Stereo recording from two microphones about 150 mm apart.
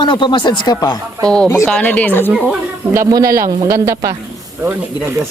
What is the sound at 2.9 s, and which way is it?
Speech, 25° right (ahead or behind).